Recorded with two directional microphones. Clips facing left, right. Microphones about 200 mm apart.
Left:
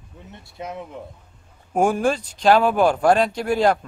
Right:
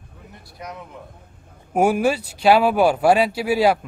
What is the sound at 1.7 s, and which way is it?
Speech, 10° right (ahead or behind).